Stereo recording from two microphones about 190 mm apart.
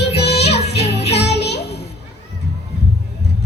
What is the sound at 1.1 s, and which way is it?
Music, 60° left (ahead or behind).